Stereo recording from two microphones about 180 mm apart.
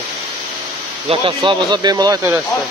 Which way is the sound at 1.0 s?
30° right (ahead or behind).